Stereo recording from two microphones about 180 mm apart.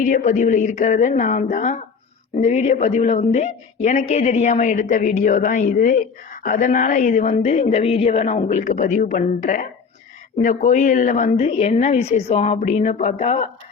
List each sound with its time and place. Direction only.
0.0 s a woman's voice: 45° left (ahead or behind)